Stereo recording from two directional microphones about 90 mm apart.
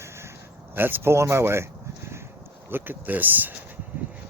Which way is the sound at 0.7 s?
20° right (ahead or behind).